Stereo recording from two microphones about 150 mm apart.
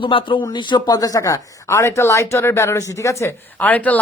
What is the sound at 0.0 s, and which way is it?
Speech, 35° left (ahead or behind).